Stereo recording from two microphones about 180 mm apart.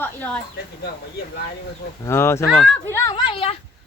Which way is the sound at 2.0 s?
15° left (ahead or behind).